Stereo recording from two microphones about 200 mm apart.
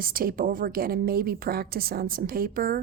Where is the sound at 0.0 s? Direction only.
45° right (ahead or behind).